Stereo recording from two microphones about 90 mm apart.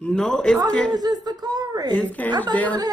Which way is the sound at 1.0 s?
50° right (ahead or behind).